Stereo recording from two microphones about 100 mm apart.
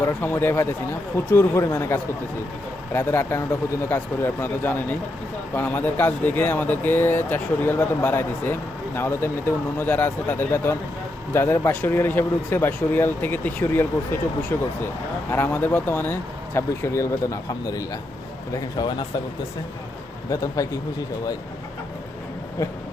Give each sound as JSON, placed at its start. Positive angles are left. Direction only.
{"t": 0.0, "sound": "speech", "side_deg": 20}
{"t": 18.8, "sound": "speech", "side_deg": 50}
{"t": 20.3, "sound": "speech", "side_deg": 30}